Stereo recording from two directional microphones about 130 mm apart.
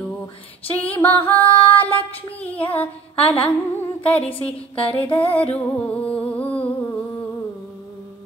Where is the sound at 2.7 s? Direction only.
10° left (ahead or behind).